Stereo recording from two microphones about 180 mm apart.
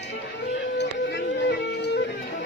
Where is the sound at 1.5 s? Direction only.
70° left (ahead or behind).